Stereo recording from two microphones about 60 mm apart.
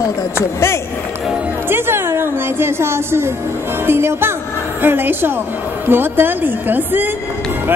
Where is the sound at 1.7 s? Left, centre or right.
Right.